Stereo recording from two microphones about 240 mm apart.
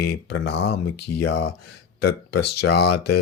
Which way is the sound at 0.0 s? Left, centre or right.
Left.